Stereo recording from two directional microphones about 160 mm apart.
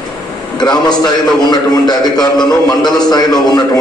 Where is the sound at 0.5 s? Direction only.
25° left (ahead or behind).